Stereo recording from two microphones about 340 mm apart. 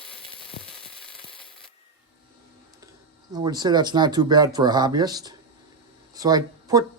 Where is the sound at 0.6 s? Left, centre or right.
Left.